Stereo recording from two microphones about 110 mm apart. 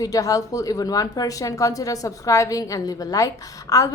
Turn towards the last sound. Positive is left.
turn(degrees=30)  # may be behind; listen again after turning